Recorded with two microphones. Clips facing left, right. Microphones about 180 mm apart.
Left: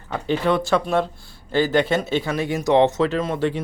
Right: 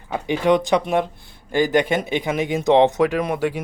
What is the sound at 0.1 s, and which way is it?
Speech, 15° right (ahead or behind).